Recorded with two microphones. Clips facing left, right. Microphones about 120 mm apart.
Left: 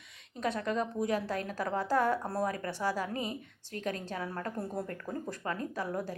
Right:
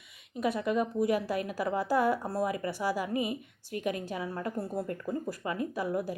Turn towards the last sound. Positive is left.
turn(degrees=-10)  # may be behind; listen again after turning